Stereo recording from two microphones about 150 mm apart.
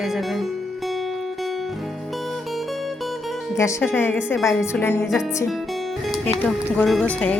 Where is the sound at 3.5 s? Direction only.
20° left (ahead or behind).